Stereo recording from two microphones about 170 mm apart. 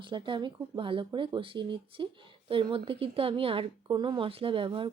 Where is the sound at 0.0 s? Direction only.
30° right (ahead or behind).